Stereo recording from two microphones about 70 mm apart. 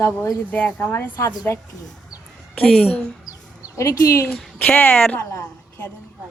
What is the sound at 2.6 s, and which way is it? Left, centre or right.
Speech, centre.